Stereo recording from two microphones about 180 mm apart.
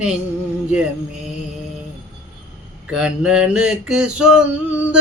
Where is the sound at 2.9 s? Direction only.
5° right (ahead or behind).